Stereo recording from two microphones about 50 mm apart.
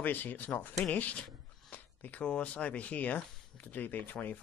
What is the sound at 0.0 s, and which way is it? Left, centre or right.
Speech, left.